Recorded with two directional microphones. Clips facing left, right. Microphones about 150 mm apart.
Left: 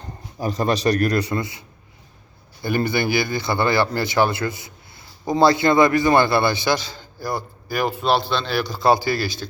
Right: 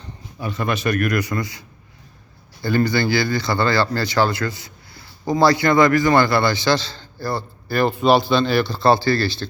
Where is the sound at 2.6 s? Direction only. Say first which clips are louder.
Right 2 dB; 20° left (ahead or behind).